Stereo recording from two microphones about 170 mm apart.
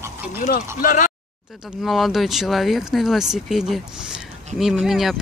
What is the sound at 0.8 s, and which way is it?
Speech, 55° left (ahead or behind).